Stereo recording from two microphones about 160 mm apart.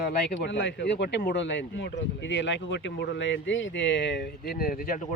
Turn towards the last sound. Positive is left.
turn(degrees=60)  # may be behind; listen again after turning